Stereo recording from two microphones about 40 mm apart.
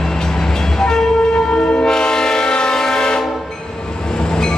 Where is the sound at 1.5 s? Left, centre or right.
Left.